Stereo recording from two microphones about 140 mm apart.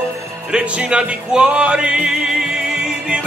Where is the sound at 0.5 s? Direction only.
5° right (ahead or behind).